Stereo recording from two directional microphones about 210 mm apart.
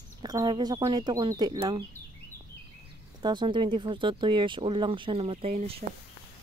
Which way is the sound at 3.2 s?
20° right (ahead or behind).